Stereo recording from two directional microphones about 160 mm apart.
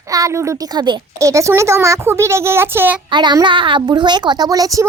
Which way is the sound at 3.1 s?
30° right (ahead or behind).